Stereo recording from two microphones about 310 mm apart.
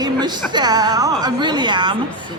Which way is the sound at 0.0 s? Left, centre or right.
Centre.